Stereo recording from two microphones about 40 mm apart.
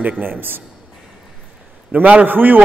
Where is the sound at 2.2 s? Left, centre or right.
Right.